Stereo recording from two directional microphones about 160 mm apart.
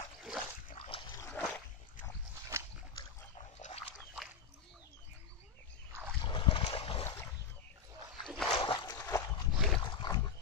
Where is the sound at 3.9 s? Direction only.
Centre (ahead or behind).